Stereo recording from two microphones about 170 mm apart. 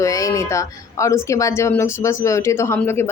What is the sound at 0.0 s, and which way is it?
A woman's voice, 20° left (ahead or behind).